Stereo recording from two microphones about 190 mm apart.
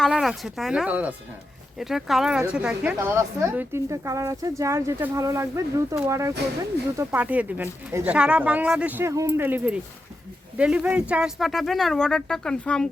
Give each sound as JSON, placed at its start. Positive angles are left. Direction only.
{"t": 0.0, "sound": "speech", "side_deg": 0}